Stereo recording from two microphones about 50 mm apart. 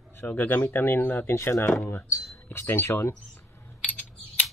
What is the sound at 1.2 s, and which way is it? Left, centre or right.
Speech, left.